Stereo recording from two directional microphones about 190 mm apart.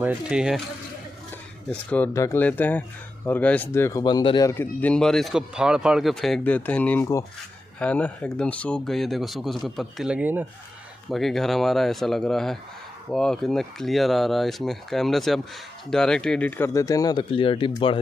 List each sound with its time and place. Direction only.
0.0 s speech: 5° right (ahead or behind)
1.7 s speech: 10° left (ahead or behind); by 4.5 s 25° left (ahead or behind)
4.5 s speech: 10° left (ahead or behind); by 18.0 s 25° left (ahead or behind)